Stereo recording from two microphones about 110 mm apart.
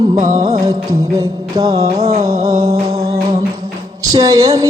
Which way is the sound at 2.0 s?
70° right (ahead or behind).